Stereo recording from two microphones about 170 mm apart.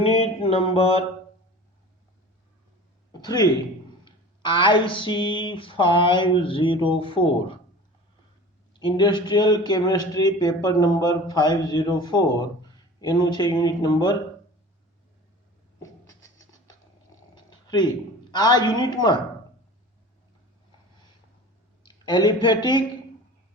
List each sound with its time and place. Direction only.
0.0 s a sound: 35° left (ahead or behind)
3.1 s speech: 25° left (ahead or behind)
8.7 s a man's voice: 25° left (ahead or behind)
15.8 s a sound: 20° left (ahead or behind)
18.8 s a man's voice: 25° left (ahead or behind)
21.8 s speech: 25° left (ahead or behind)